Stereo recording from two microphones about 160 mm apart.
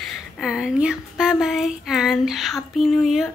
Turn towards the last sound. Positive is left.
turn(degrees=0)  # may be behind; listen again after turning